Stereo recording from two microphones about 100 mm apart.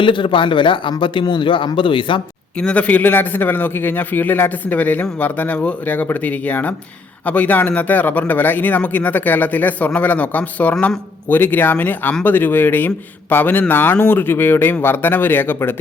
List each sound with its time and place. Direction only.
0.0 s a man's voice: 55° left (ahead or behind)
2.6 s a man's voice: 10° left (ahead or behind)